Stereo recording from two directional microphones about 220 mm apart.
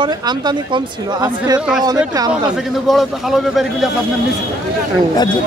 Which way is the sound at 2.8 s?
Centre (ahead or behind).